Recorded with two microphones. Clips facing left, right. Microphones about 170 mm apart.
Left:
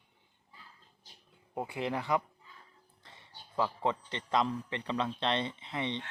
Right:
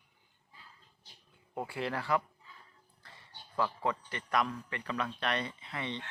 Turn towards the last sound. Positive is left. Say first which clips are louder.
# left 3 dB
turn(degrees=20)  # may be behind; listen again after turning